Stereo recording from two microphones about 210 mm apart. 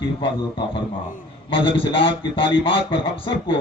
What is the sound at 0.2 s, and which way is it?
Speech, 25° left (ahead or behind).